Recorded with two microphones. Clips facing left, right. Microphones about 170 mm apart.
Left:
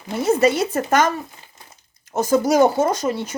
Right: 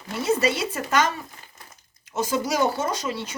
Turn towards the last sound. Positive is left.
turn(degrees=45)  # may be behind; listen again after turning